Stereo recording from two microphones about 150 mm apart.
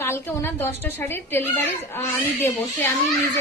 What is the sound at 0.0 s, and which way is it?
A woman's voice, 15° left (ahead or behind).